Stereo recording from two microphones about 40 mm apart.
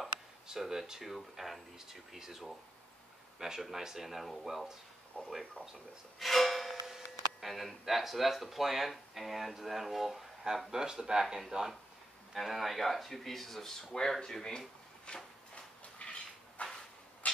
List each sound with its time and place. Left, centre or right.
0.5 s speech: centre
5.2 s speech: left
6.1 s music: centre
6.7 s speech: centre
10.7 s speech: centre
12.4 s speech: centre
15.1 s speech: left
15.5 s a sound: left